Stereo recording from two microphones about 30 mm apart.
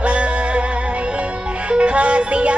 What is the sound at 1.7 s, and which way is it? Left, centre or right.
Music, right.